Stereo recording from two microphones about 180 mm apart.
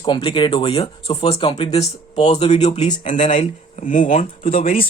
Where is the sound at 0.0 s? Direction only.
30° left (ahead or behind); by 4.3 s 45° left (ahead or behind).